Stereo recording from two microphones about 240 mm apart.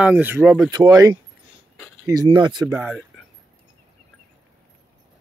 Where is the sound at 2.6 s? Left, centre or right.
Centre.